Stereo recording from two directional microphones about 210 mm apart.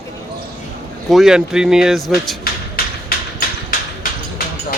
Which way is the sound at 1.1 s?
Centre (ahead or behind).